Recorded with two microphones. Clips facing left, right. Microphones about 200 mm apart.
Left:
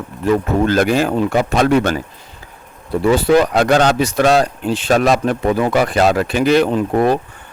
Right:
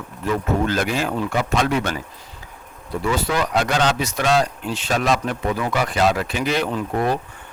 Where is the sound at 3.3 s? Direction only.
60° left (ahead or behind).